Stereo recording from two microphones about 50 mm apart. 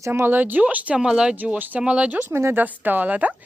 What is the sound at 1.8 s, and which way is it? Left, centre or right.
Speech, right.